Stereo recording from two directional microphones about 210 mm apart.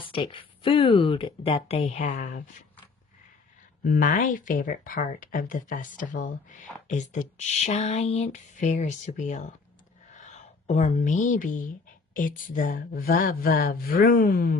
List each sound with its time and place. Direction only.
0.0 s speech: 25° left (ahead or behind)
3.8 s a woman's voice: 40° left (ahead or behind)